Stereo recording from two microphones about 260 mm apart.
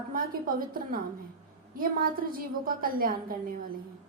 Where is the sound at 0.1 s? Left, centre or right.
Right.